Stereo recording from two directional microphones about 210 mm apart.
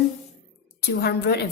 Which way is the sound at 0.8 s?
50° left (ahead or behind).